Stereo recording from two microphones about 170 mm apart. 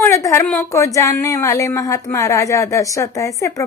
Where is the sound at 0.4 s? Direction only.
5° left (ahead or behind).